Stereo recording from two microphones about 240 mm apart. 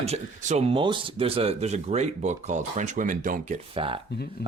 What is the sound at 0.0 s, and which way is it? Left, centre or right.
Speech, right.